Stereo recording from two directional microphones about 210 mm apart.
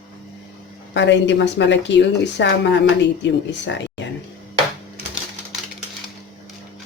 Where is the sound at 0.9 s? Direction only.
60° left (ahead or behind).